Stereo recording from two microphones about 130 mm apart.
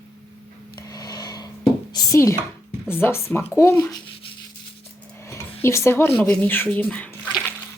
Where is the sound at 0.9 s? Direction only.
30° left (ahead or behind).